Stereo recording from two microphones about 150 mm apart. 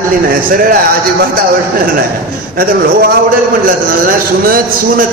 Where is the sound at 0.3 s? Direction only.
70° right (ahead or behind).